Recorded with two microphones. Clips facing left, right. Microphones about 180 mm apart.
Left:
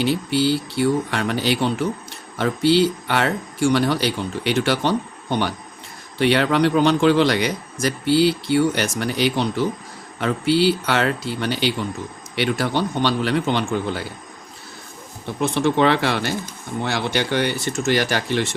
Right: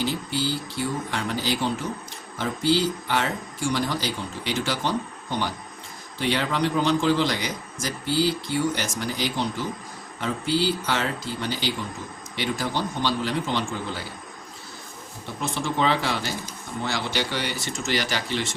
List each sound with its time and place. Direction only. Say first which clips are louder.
0.0 s a man's voice: left 7 dB; 70° left (ahead or behind)
15.4 s a man's voice: left 8 dB; 65° left (ahead or behind)